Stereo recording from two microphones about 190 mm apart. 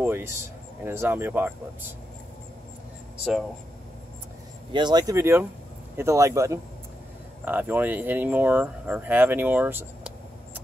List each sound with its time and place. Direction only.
0.0 s a sound: 10° right (ahead or behind)
0.8 s speech: 10° right (ahead or behind)
4.7 s speech: 20° right (ahead or behind)